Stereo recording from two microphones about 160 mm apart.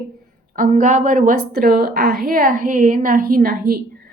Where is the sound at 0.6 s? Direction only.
55° right (ahead or behind).